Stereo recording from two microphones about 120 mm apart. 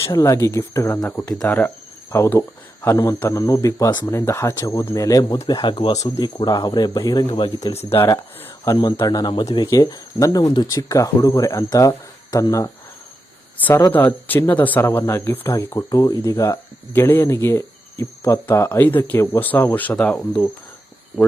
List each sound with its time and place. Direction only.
0.0 s speech: 30° left (ahead or behind)
1.3 s speech: 5° left (ahead or behind)
2.1 s speech: 25° left (ahead or behind)
5.5 s speech: 40° left (ahead or behind)
7.9 s speech: 25° left (ahead or behind)
13.9 s speech: 15° left (ahead or behind)